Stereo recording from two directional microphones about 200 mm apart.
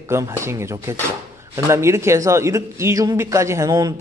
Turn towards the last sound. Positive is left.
turn(degrees=-15)  # may be behind; listen again after turning